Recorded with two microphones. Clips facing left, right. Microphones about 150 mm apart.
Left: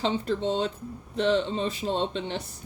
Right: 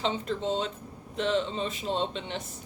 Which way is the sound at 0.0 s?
35° left (ahead or behind).